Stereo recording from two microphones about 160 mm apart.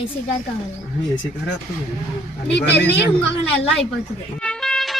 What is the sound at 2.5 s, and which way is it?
Speech, 90° left.